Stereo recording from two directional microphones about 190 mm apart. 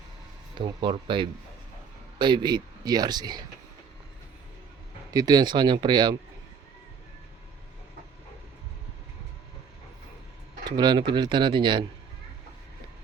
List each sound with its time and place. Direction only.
0.6 s speech: 25° right (ahead or behind)
5.1 s speech: 20° right (ahead or behind)
10.7 s speech: 25° right (ahead or behind)